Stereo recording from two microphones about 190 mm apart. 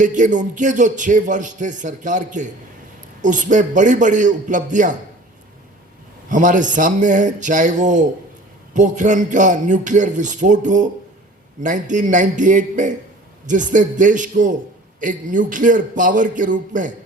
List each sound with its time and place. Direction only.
0.0 s speech: 40° right (ahead or behind)
6.2 s a man's voice: 40° right (ahead or behind)